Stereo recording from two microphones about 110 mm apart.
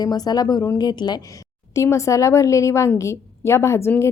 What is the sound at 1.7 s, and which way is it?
A woman's voice, 25° left (ahead or behind).